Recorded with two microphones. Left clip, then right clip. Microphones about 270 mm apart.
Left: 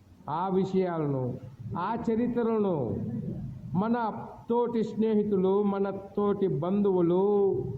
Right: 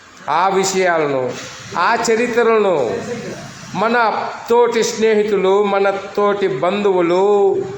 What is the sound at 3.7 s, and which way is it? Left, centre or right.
A man's voice, left.